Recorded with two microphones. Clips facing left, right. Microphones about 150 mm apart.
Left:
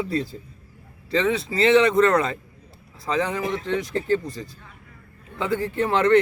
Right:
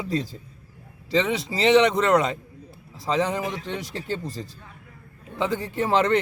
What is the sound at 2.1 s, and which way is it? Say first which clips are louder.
A man's voice: right 1 dB; 20° right (ahead or behind).